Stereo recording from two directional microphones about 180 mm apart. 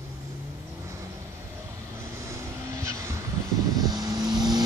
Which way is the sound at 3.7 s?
20° right (ahead or behind).